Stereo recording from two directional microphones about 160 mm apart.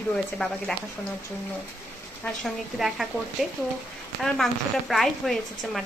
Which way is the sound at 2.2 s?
Centre (ahead or behind).